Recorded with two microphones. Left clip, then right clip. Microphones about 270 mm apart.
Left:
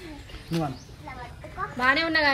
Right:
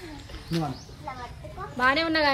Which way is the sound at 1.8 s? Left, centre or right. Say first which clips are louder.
Even; centre.